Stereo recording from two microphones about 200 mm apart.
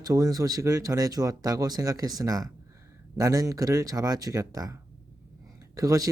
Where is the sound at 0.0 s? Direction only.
20° right (ahead or behind).